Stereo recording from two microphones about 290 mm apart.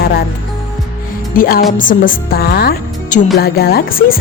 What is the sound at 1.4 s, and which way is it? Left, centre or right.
Speech, left.